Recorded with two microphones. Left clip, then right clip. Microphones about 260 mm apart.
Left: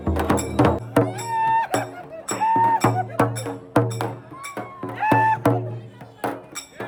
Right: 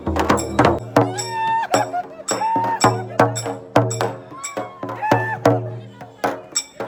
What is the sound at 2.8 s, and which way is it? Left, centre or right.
Music, right.